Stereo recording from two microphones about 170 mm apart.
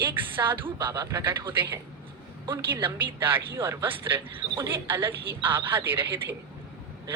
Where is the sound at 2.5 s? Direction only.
15° right (ahead or behind).